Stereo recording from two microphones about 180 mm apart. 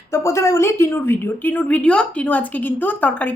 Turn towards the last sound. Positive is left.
turn(degrees=10)  # may be behind; listen again after turning